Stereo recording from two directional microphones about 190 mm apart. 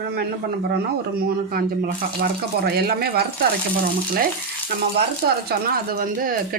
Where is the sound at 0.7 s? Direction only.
55° right (ahead or behind).